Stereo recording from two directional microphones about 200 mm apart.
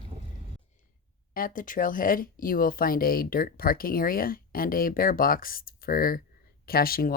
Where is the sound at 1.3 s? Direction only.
45° left (ahead or behind).